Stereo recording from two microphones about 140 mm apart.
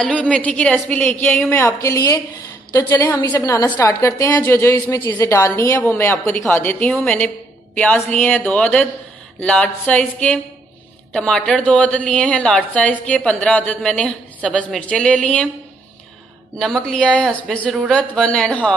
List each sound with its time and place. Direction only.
0.0 s a woman's voice: 5° left (ahead or behind)
1.5 s a woman's voice: 20° left (ahead or behind)
16.5 s a woman's voice: 5° left (ahead or behind)